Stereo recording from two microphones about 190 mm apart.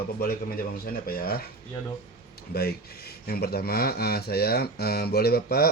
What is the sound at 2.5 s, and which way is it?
Speech, 55° left (ahead or behind).